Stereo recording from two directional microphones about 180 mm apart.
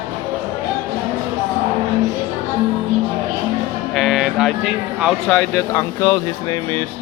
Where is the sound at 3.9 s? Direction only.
Centre (ahead or behind).